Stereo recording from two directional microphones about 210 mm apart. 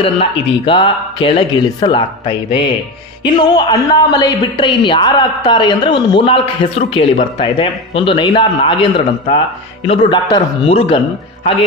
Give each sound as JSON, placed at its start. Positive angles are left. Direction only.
{"t": 0.0, "sound": "a woman's voice", "side_deg": 25}